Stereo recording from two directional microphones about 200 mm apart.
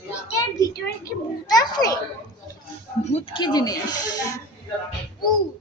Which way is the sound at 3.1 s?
30° left (ahead or behind).